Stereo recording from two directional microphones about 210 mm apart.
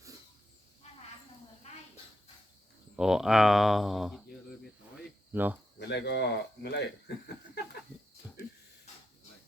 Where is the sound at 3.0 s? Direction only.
Centre (ahead or behind).